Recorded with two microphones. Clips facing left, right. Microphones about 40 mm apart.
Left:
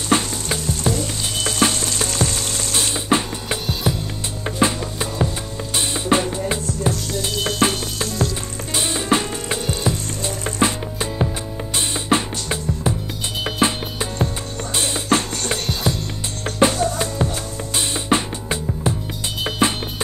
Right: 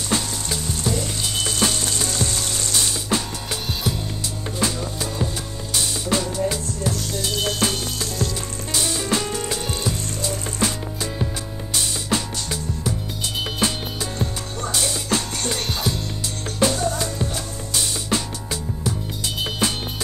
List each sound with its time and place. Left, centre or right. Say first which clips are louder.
0.1 s frying: left 6 dB; left
1.4 s frying: left 4 dB; left
2.7 s music: left 5 dB; left
7.6 s frying: left 4 dB; left
8.7 s music: left 4 dB; left
9.8 s sizzle: left 2 dB; left
11.7 s music: left 4 dB; left
15.6 s music: left 2 dB; centre
16.4 s music: left 4 dB; left